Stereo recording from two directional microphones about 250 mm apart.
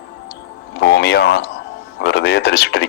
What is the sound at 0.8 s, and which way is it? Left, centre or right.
Speech, left.